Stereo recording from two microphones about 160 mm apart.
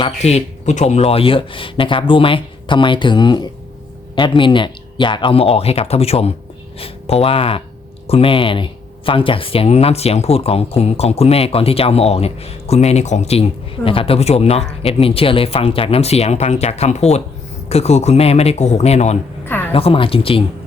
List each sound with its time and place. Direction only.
0.0 s speech: 40° left (ahead or behind)